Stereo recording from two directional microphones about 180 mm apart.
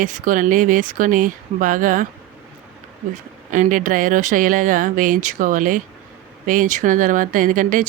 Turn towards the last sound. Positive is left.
turn(degrees=-50)  # may be behind; listen again after turning